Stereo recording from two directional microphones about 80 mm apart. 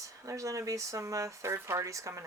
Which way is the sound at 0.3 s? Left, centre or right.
Right.